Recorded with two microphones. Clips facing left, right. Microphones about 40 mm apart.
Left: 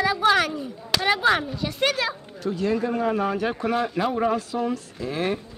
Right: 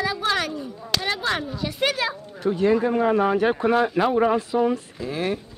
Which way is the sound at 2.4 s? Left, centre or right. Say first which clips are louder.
Right 5 dB; right.